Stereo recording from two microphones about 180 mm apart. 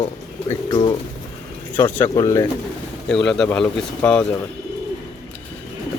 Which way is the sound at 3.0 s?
5° left (ahead or behind).